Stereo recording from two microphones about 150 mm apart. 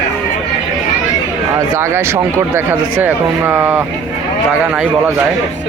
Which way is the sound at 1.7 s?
15° right (ahead or behind).